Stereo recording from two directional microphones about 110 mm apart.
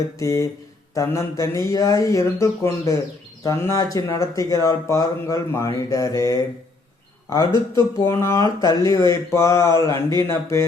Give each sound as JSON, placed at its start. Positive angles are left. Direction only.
{"t": 0.2, "sound": "a man's voice", "side_deg": 30}
{"t": 8.0, "sound": "speech", "side_deg": 25}